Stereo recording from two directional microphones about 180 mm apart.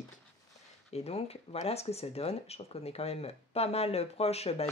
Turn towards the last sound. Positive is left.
turn(degrees=35)  # may be behind; listen again after turning